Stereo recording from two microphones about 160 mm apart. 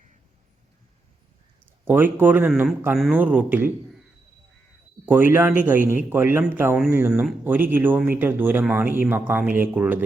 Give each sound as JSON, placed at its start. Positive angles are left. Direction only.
{"t": 1.8, "sound": "speech", "side_deg": -15}
{"t": 2.5, "sound": "speech", "side_deg": 0}
{"t": 5.0, "sound": "speech", "side_deg": -10}